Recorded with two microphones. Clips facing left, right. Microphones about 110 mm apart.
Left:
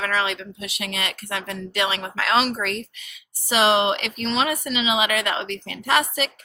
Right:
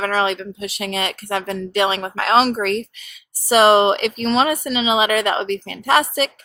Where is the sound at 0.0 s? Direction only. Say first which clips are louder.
Right 5 dB; 35° right (ahead or behind).